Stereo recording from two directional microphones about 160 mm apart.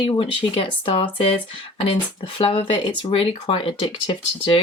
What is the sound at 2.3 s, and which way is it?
Speech, 35° left (ahead or behind).